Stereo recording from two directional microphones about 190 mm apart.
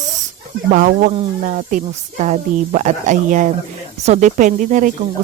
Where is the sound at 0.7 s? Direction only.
45° right (ahead or behind).